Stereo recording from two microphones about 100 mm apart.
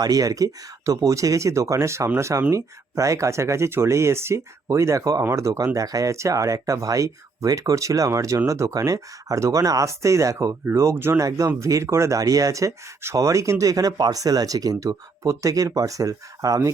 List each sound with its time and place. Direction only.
0.0 s speech: 35° right (ahead or behind)